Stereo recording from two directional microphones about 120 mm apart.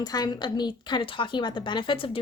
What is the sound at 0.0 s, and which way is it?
A woman's voice, 35° left (ahead or behind).